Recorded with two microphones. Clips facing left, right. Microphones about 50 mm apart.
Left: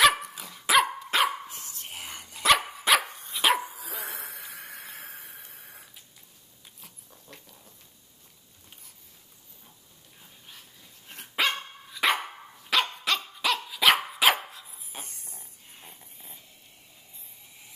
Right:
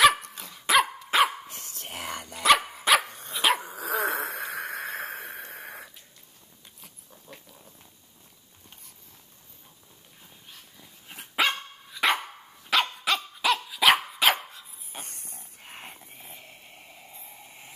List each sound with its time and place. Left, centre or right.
0.0 s dog: centre
1.5 s whispering: right
2.4 s dog: centre
3.7 s a sound: right
6.8 s dog: centre
10.8 s dog: centre
15.0 s a sound: right